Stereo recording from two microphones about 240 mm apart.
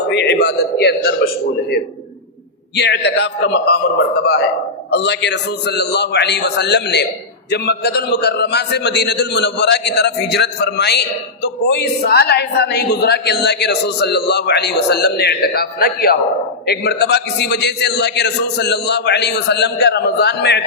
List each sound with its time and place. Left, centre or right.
0.1 s a sound: left
2.7 s a man's voice: left
4.9 s a man's voice: left